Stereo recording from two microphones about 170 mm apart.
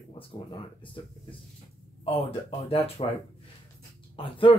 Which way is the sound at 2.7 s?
35° left (ahead or behind).